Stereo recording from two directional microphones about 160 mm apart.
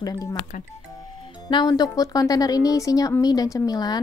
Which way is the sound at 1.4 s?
25° left (ahead or behind).